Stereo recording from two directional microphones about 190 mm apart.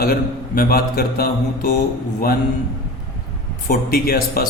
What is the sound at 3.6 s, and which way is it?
Mantra, 45° left (ahead or behind).